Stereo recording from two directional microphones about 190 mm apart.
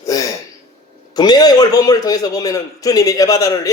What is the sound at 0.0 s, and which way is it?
Throat clearing, 20° left (ahead or behind).